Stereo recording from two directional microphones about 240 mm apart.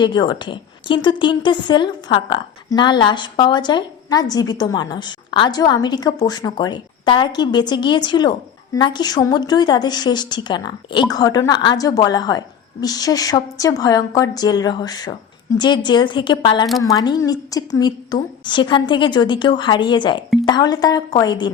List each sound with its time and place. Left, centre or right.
0.0 s a woman's voice: centre